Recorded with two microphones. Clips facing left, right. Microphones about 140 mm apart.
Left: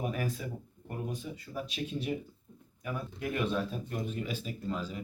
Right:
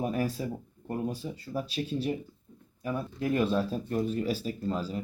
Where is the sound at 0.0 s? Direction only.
35° right (ahead or behind).